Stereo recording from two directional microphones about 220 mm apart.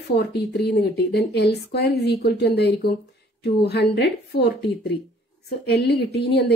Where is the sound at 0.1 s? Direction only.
50° left (ahead or behind).